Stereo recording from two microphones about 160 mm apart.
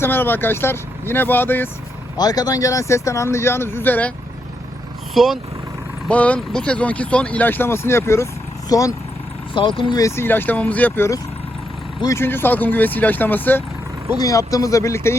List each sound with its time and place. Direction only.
0.0 s speech: 15° left (ahead or behind)
2.1 s speech: 25° left (ahead or behind)
5.1 s speech: centre (ahead or behind)
6.1 s speech: 10° left (ahead or behind)